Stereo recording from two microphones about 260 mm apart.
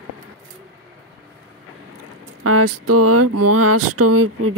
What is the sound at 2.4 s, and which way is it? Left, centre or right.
Speech, right.